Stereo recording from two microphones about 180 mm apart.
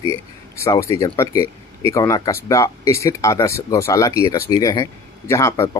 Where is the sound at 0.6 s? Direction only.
15° left (ahead or behind).